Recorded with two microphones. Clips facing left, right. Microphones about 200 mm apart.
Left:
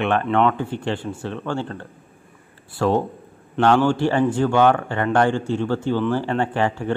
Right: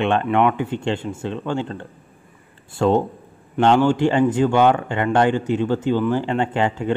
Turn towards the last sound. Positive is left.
turn(degrees=-20)  # may be behind; listen again after turning